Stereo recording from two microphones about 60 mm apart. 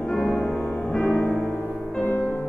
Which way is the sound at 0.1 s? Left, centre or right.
Centre.